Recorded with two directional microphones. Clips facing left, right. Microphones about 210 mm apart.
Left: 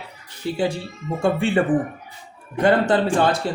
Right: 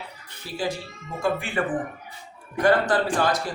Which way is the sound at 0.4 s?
25° left (ahead or behind).